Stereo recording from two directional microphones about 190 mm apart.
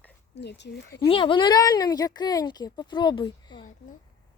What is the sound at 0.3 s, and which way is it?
Speech, 65° left (ahead or behind).